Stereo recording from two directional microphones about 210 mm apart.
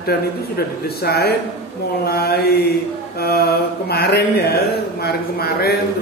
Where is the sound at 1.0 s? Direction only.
50° left (ahead or behind).